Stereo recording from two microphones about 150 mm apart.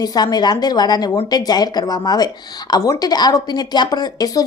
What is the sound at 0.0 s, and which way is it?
A woman's voice, 25° left (ahead or behind).